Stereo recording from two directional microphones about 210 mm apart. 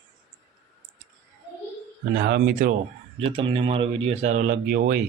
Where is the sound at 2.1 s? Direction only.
55° right (ahead or behind).